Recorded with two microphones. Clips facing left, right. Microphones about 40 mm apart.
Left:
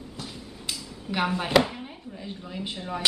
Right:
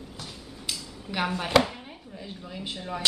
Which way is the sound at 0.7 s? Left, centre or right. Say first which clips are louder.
Left 2 dB; centre.